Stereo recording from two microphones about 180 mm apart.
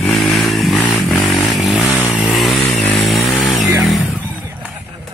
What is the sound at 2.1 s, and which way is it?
Vehicle, centre (ahead or behind).